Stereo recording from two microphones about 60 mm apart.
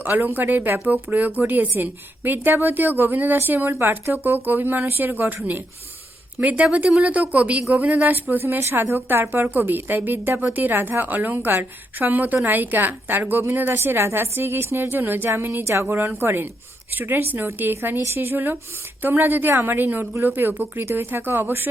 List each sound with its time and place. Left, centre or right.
0.0 s speech: right
6.4 s a woman's voice: right
16.9 s speech: right